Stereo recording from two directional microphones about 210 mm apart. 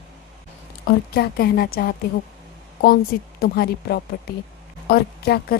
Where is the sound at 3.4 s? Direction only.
50° left (ahead or behind).